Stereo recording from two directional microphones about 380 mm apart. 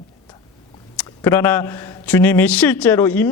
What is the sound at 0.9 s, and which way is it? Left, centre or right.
A man's voice, centre.